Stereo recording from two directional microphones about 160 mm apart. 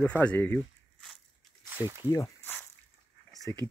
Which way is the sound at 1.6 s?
15° right (ahead or behind).